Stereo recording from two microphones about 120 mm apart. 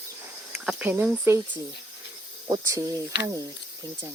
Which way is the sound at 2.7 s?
30° right (ahead or behind).